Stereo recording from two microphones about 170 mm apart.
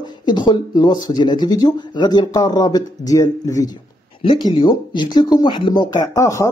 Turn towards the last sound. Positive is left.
turn(degrees=20)  # may be behind; listen again after turning